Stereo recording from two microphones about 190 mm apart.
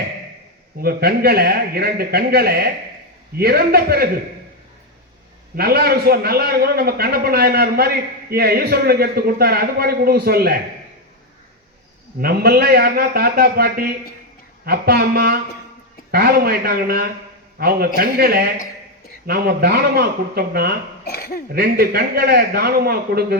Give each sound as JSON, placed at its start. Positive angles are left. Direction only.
{"t": 0.8, "sound": "a man's voice", "side_deg": -55}
{"t": 5.5, "sound": "a man's voice", "side_deg": -55}
{"t": 12.2, "sound": "a man's voice", "side_deg": -55}
{"t": 21.0, "sound": "speech", "side_deg": 50}
{"t": 21.5, "sound": "a man's voice", "side_deg": -55}